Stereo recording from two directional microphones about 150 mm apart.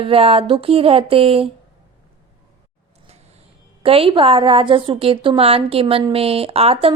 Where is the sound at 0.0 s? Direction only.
40° right (ahead or behind).